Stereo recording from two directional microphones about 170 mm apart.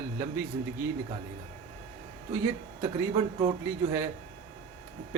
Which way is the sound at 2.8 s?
20° right (ahead or behind).